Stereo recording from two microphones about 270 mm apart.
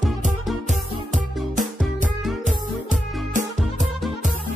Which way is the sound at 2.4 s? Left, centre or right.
Right.